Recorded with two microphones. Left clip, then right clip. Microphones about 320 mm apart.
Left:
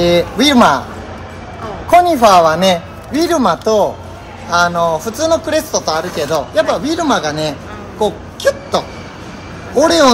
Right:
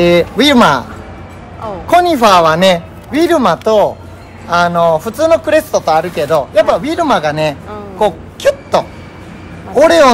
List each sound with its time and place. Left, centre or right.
0.0 s a man's voice: right
1.9 s a man's voice: right
9.8 s a man's voice: right